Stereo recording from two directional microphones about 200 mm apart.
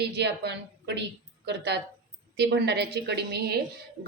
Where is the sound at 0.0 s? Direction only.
55° right (ahead or behind).